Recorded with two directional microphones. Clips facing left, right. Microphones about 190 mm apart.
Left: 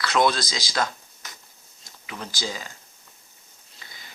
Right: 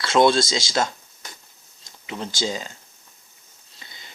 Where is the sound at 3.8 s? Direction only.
25° right (ahead or behind).